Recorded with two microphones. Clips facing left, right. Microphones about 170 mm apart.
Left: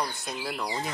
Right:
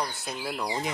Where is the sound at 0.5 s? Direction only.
15° right (ahead or behind).